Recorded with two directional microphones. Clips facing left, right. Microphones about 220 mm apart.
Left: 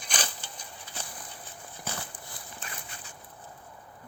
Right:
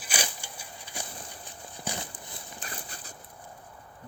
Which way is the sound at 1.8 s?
15° right (ahead or behind).